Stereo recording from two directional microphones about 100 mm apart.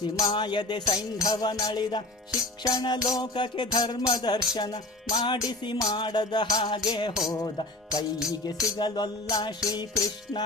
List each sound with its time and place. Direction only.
0.0 s music: 45° left (ahead or behind)
1.2 s music: 40° left (ahead or behind)
7.3 s music: 35° left (ahead or behind)